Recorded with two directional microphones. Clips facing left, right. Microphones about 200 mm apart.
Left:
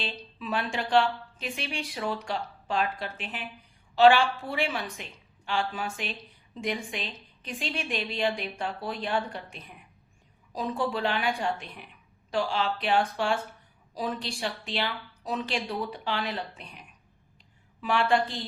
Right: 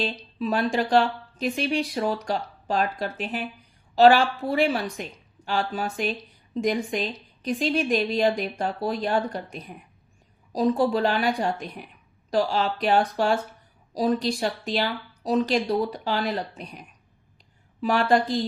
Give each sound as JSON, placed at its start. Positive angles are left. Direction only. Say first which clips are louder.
{"t": 0.0, "sound": "a woman's voice", "louder": "right 9 dB", "side_deg": -40}